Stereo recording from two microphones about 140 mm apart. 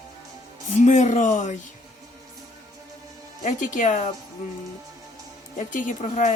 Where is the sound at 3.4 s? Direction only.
65° left (ahead or behind).